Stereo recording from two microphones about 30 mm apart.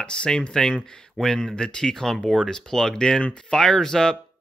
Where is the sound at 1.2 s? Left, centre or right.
Centre.